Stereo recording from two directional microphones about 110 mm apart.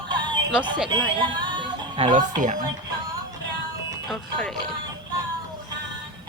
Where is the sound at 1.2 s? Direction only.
45° right (ahead or behind).